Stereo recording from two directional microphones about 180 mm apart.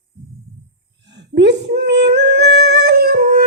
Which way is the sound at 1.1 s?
70° right (ahead or behind).